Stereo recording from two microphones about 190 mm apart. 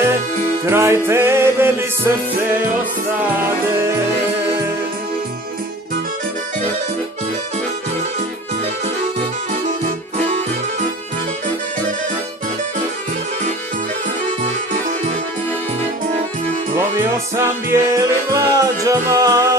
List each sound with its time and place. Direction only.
0.6 s music: 15° right (ahead or behind)
10.2 s music: 35° right (ahead or behind)
17.3 s music: 15° right (ahead or behind)